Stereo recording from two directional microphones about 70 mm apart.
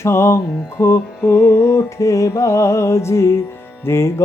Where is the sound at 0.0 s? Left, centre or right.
Left.